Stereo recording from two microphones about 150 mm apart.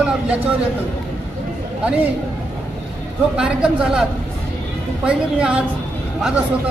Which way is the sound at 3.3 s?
5° right (ahead or behind).